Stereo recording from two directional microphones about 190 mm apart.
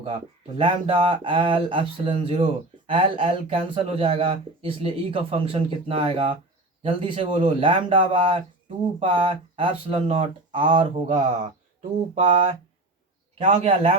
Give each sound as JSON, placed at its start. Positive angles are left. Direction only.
{"t": 0.0, "sound": "speech", "side_deg": -25}